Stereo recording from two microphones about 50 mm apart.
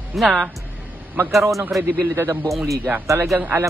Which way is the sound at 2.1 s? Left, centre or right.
Right.